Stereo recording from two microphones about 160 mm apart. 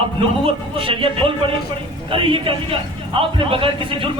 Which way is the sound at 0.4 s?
35° right (ahead or behind).